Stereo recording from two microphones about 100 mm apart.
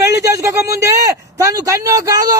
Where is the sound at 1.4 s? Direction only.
30° right (ahead or behind).